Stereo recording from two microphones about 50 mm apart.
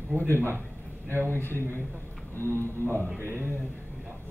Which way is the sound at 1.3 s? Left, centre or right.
Left.